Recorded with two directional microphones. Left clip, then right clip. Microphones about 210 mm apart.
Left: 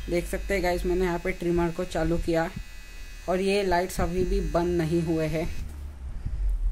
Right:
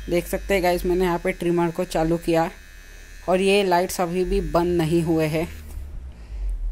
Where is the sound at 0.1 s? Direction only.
20° right (ahead or behind).